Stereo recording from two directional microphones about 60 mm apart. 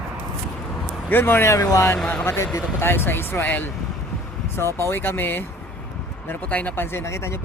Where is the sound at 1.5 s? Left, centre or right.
Left.